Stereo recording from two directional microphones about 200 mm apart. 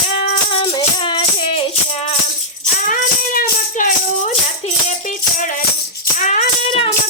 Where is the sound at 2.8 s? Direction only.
45° left (ahead or behind).